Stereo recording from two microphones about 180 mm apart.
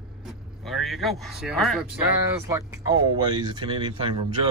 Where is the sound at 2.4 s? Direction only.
15° right (ahead or behind).